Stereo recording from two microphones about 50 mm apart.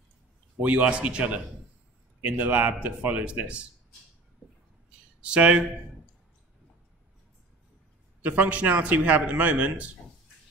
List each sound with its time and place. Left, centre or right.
0.6 s a man's voice: right
5.2 s a man's voice: right
8.2 s a man's voice: right